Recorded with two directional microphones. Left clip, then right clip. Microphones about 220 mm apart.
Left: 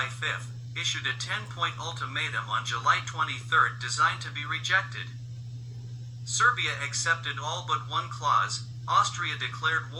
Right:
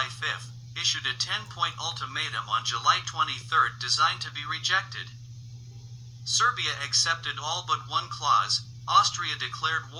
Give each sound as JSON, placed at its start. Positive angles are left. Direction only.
{"t": 0.2, "sound": "speech", "side_deg": -15}
{"t": 6.3, "sound": "speech", "side_deg": -15}